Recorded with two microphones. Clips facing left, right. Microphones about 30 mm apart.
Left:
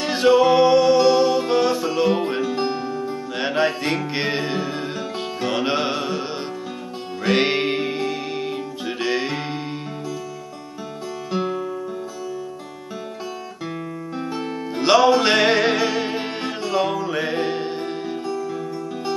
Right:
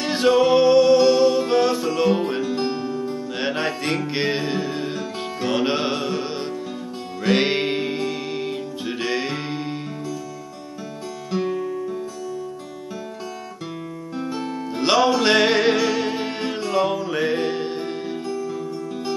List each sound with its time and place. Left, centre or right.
0.0 s music: centre
3.3 s music: centre
7.2 s music: centre
11.3 s music: centre
14.1 s music: centre